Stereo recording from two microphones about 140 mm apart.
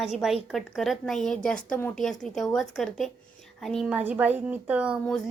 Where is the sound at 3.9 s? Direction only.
10° right (ahead or behind).